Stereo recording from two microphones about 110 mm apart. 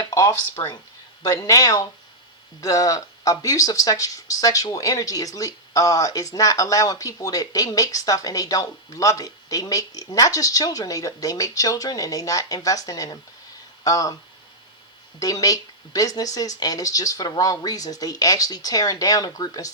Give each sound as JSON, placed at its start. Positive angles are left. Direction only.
{"t": 0.0, "sound": "speech", "side_deg": 30}
{"t": 15.2, "sound": "speech", "side_deg": 35}